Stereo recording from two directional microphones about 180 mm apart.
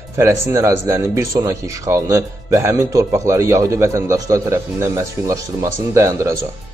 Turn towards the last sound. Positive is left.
turn(degrees=-15)  # may be behind; listen again after turning